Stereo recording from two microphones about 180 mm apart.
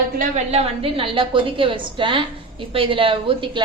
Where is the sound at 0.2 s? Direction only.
40° right (ahead or behind).